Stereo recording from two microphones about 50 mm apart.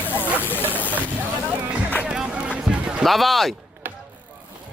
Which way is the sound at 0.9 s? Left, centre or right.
Right.